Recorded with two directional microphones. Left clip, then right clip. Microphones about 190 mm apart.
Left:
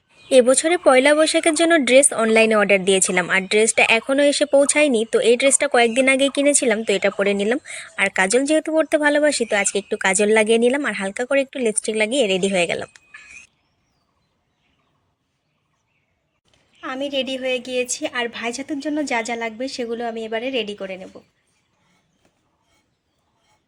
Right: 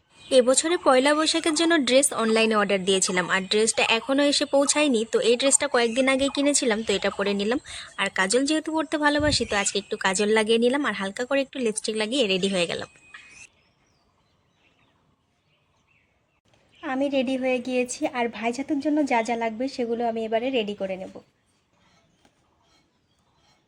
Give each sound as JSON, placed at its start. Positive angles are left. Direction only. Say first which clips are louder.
{"t": 0.3, "sound": "speech", "louder": "left 5 dB", "side_deg": 15}
{"t": 16.8, "sound": "a woman's voice", "louder": "left 1 dB", "side_deg": -5}